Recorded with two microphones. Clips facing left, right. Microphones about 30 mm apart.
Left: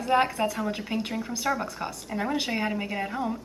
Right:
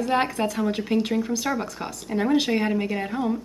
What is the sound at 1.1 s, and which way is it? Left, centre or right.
Speech, centre.